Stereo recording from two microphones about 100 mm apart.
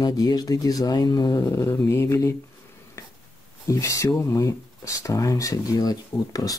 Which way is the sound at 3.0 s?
30° left (ahead or behind).